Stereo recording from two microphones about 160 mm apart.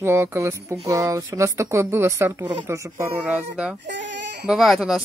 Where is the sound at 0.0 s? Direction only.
15° right (ahead or behind).